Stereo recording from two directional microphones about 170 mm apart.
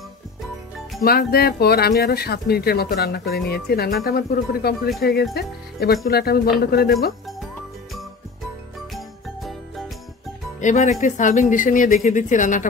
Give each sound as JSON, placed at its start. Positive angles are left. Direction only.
{"t": 1.0, "sound": "speech", "side_deg": 65}
{"t": 8.9, "sound": "jingle", "side_deg": 0}
{"t": 10.6, "sound": "speech", "side_deg": 45}